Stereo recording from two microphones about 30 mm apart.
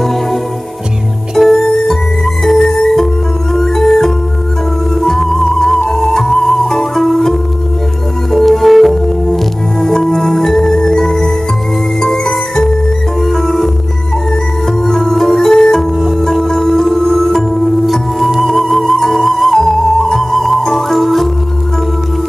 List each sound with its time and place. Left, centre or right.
0.0 s music: centre
9.8 s music: centre
14.9 s music: centre
18.4 s music: centre